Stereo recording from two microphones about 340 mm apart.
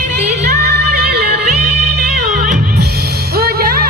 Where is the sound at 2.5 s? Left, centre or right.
Right.